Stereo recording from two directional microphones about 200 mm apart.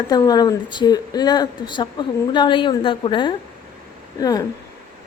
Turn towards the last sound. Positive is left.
turn(degrees=20)  # may be behind; listen again after turning